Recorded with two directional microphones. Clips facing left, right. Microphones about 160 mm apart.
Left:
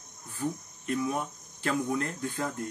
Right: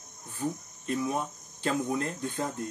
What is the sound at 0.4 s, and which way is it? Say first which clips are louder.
Cricket: even; 25° right (ahead or behind).